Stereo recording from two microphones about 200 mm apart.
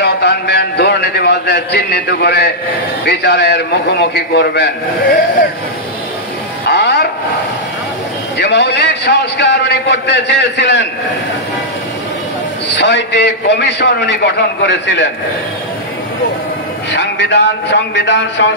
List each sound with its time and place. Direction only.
0.0 s a man's voice: 55° left (ahead or behind)
6.7 s vehicle: 55° left (ahead or behind)
8.4 s a man's voice: 55° left (ahead or behind)
12.7 s a man's voice: 60° left (ahead or behind)
16.9 s a man's voice: 60° left (ahead or behind)